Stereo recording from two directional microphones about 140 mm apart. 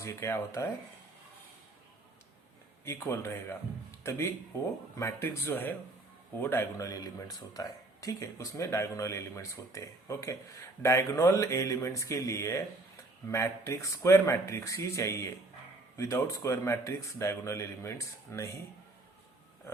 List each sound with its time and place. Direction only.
0.0 s speech: 20° left (ahead or behind)
2.8 s speech: 20° left (ahead or behind)
4.9 s speech: 20° left (ahead or behind)